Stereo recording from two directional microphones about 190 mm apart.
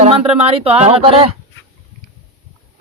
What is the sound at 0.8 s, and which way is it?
Speech, 30° right (ahead or behind).